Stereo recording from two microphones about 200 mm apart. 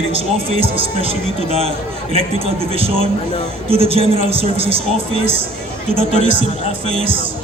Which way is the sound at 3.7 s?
30° right (ahead or behind).